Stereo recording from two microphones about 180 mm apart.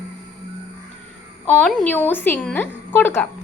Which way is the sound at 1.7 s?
5° left (ahead or behind).